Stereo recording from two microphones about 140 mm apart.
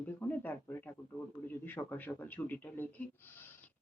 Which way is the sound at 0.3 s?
15° left (ahead or behind).